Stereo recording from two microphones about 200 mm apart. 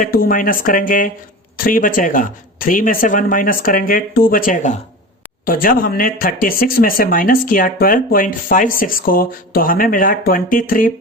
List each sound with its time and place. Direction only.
0.0 s speech: 45° left (ahead or behind)